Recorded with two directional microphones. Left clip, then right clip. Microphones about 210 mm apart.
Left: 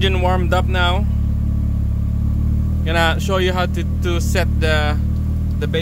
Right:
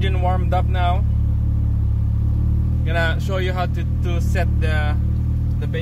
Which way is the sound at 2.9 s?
30° left (ahead or behind).